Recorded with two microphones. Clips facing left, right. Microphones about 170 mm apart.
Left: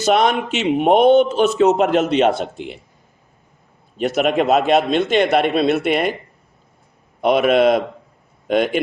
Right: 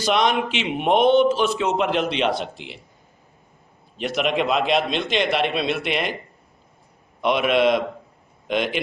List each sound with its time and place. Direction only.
0.0 s a man's voice: 50° left (ahead or behind)
3.9 s a man's voice: 45° left (ahead or behind)
7.2 s a man's voice: 45° left (ahead or behind)